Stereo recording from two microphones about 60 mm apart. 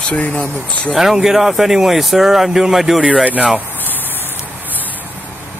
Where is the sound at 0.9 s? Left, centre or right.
Centre.